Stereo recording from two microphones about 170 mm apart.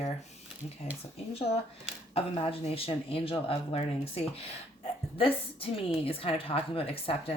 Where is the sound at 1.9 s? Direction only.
35° left (ahead or behind).